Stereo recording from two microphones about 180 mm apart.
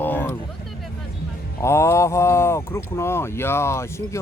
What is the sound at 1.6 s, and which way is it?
Speech, 15° left (ahead or behind).